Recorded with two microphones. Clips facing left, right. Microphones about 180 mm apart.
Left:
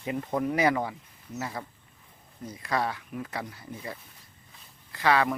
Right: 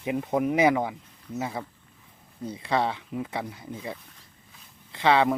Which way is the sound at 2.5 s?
25° right (ahead or behind).